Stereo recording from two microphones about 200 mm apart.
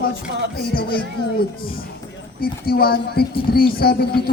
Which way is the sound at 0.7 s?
50° left (ahead or behind).